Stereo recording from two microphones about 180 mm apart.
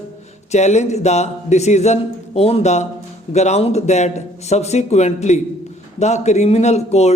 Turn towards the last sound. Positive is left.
turn(degrees=35)  # may be behind; listen again after turning